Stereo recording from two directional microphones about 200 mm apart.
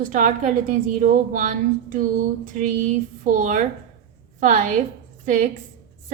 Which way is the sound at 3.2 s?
40° right (ahead or behind).